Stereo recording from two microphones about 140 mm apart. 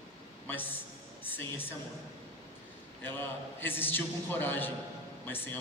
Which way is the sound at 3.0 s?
15° left (ahead or behind).